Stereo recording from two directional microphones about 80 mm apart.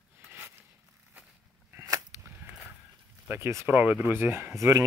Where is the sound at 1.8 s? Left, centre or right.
Right.